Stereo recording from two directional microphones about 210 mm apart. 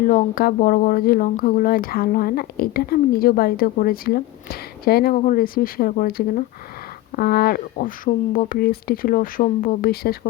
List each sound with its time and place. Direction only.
0.0 s speech: 40° left (ahead or behind)